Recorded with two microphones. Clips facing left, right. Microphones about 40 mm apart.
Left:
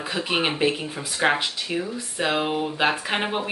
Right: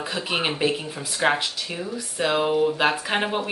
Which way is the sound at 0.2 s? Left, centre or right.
Centre.